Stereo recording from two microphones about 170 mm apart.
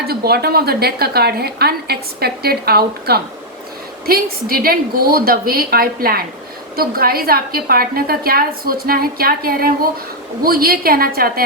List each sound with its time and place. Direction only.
0.1 s a woman's voice: 65° right (ahead or behind)